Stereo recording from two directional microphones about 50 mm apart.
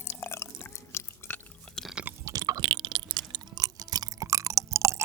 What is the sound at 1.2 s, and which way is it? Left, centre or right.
Chewing, left.